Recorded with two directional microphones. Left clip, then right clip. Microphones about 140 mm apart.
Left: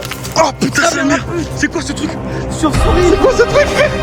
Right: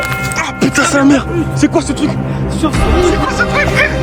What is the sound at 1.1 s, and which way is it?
Speech, 20° right (ahead or behind).